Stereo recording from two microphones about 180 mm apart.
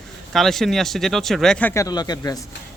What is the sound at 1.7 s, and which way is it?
Speech, 20° left (ahead or behind).